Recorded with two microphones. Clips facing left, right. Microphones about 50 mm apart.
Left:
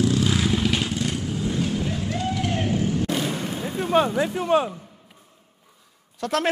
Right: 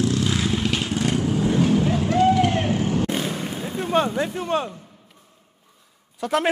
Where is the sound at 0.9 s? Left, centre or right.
Right.